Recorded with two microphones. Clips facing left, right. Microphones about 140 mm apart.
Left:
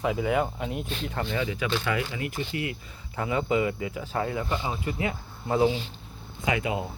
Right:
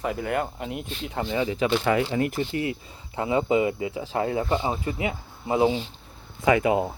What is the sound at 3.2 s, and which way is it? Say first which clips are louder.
Speech: right 3 dB; 25° right (ahead or behind).